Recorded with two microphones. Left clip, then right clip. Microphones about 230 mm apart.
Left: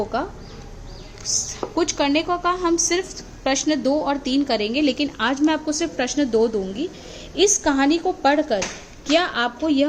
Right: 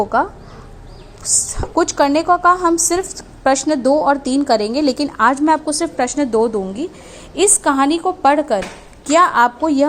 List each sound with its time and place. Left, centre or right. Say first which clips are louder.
1.7 s a woman's voice: right 6 dB; right